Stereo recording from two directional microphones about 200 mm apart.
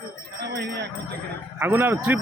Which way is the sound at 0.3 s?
55° right (ahead or behind).